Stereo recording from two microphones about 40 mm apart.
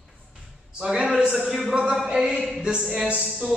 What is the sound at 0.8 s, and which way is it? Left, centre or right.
Speech, centre.